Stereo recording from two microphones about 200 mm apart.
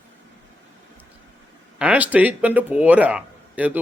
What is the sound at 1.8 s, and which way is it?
A man's voice, 5° right (ahead or behind).